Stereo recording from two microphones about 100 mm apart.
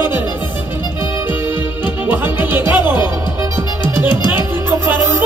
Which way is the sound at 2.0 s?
20° right (ahead or behind).